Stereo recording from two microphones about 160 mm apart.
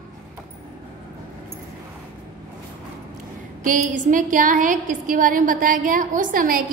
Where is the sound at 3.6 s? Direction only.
55° right (ahead or behind).